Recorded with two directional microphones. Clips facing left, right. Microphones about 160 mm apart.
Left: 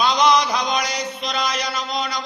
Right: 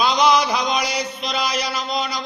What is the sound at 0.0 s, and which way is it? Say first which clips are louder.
Mantra: even; centre (ahead or behind).